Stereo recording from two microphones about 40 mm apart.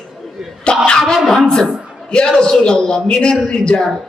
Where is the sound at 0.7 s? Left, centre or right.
Left.